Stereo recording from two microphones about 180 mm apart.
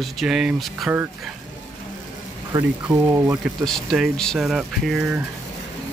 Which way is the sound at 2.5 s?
20° right (ahead or behind).